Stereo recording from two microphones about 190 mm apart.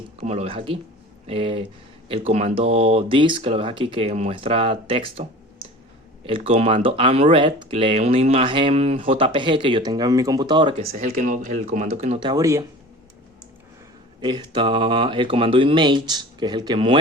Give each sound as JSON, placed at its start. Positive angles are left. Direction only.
{"t": 0.2, "sound": "speech", "side_deg": -35}
{"t": 10.9, "sound": "speech", "side_deg": -40}
{"t": 14.2, "sound": "speech", "side_deg": -25}